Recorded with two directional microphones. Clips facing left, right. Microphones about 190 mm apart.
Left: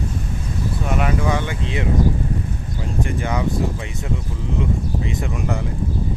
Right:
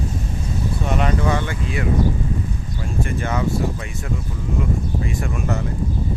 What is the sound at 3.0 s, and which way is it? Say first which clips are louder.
Speech: even; 15° left (ahead or behind).